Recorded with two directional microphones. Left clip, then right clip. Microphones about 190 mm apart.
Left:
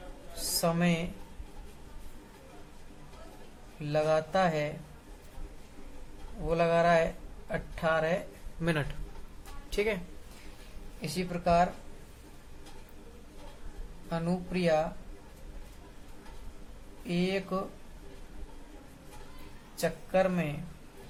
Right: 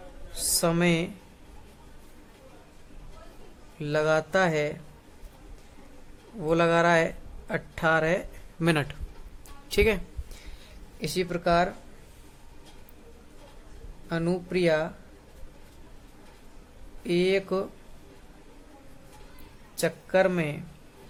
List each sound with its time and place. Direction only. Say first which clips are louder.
0.6 s speech: right 5 dB; 55° right (ahead or behind)
3.8 s speech: right 3 dB; 55° right (ahead or behind)
6.5 s speech: right 3 dB; 55° right (ahead or behind)
8.6 s speech: right 6 dB; 45° right (ahead or behind)
11.0 s speech: right 5 dB; 60° right (ahead or behind)
14.1 s speech: right 6 dB; 55° right (ahead or behind)
17.1 s speech: right 8 dB; 55° right (ahead or behind)
19.7 s speech: right 4 dB; 55° right (ahead or behind)